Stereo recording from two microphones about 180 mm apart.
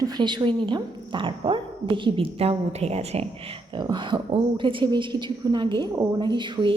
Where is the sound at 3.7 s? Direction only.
25° right (ahead or behind).